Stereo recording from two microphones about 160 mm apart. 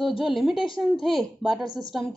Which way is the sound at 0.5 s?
30° left (ahead or behind).